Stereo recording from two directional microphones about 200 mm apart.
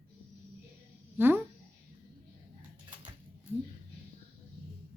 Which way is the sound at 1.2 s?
10° right (ahead or behind).